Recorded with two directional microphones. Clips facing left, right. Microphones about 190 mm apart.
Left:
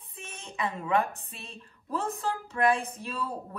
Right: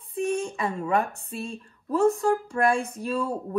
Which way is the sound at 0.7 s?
40° right (ahead or behind).